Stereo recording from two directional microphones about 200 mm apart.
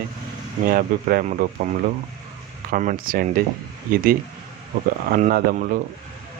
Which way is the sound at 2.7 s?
45° right (ahead or behind).